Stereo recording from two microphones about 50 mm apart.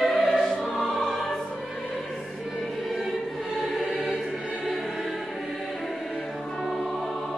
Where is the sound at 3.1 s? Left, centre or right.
Centre.